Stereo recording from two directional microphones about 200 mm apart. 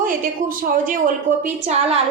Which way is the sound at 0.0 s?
45° right (ahead or behind).